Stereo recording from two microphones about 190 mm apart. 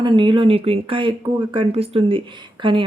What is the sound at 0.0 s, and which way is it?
Speech, 25° right (ahead or behind).